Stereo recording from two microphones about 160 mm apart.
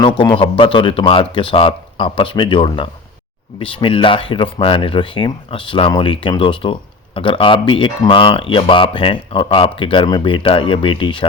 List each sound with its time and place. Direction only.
0.0 s speech: 30° left (ahead or behind)